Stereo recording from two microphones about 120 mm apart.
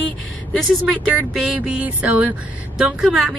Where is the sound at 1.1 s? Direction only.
5° right (ahead or behind).